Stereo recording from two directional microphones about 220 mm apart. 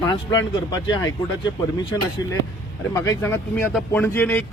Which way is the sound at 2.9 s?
15° left (ahead or behind).